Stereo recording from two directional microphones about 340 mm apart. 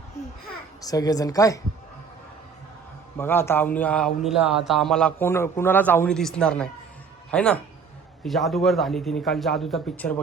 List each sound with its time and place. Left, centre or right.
0.8 s speech: centre
3.2 s a man's voice: centre